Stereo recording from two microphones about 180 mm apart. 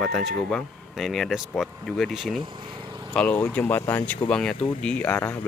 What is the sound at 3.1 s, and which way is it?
Speech, 5° left (ahead or behind).